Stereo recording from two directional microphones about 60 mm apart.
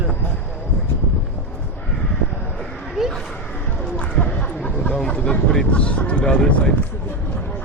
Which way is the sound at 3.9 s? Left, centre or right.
Left.